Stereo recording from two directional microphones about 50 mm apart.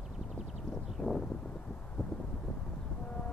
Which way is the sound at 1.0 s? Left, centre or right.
Centre.